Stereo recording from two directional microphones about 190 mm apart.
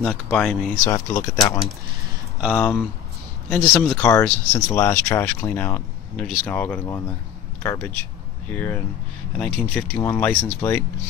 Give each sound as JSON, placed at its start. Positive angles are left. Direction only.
{"t": 0.0, "sound": "speech", "side_deg": 5}
{"t": 0.8, "sound": "speech", "side_deg": 15}
{"t": 2.4, "sound": "speech", "side_deg": 5}
{"t": 3.8, "sound": "speech", "side_deg": 10}